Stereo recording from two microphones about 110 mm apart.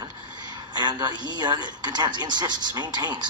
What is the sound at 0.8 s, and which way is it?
A man's voice, 45° right (ahead or behind).